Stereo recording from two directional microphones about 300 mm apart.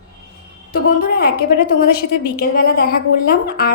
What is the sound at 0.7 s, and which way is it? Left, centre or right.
A woman's voice, left.